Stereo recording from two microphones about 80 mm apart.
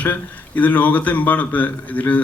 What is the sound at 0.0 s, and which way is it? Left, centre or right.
Speech, centre.